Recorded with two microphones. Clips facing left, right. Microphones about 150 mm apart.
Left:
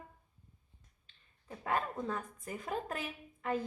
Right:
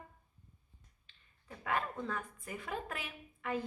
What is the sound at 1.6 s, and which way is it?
A woman's voice, 30° left (ahead or behind).